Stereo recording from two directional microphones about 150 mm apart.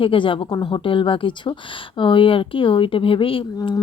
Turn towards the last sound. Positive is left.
turn(degrees=30)  # may be behind; listen again after turning